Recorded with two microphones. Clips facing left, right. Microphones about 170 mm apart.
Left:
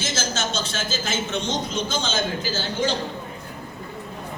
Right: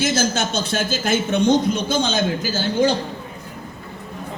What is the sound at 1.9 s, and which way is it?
Speech, 10° right (ahead or behind).